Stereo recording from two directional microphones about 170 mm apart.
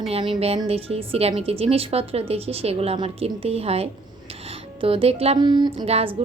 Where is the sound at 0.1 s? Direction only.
35° right (ahead or behind).